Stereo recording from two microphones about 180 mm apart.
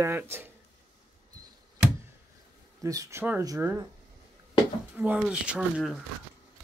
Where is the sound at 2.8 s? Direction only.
15° right (ahead or behind).